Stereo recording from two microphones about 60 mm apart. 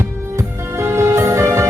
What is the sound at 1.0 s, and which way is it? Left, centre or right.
Music, right.